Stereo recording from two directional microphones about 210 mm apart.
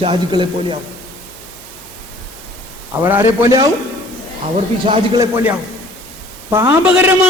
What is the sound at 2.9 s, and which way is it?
Speech, 10° right (ahead or behind).